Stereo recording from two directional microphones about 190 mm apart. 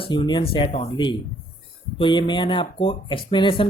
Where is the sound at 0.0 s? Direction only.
25° left (ahead or behind).